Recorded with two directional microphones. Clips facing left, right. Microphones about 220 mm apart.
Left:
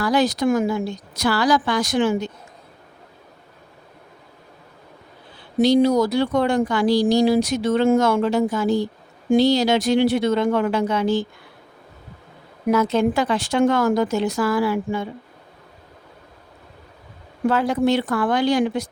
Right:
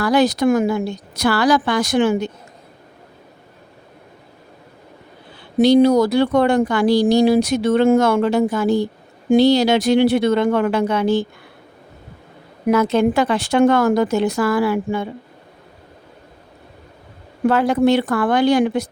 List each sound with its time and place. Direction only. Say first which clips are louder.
0.0 s speech: right 3 dB; 60° right (ahead or behind)
5.5 s speech: right 4 dB; 65° right (ahead or behind)
12.7 s speech: right 3 dB; 65° right (ahead or behind)
17.5 s speech: right 4 dB; 65° right (ahead or behind)